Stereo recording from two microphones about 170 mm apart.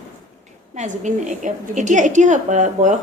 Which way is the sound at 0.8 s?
45° right (ahead or behind).